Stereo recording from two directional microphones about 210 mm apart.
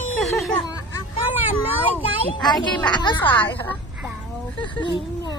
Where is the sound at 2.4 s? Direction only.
20° left (ahead or behind).